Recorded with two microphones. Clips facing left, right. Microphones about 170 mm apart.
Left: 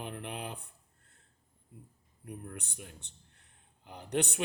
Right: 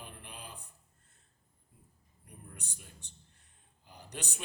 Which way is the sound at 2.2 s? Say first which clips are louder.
Left 9 dB; 60° left (ahead or behind).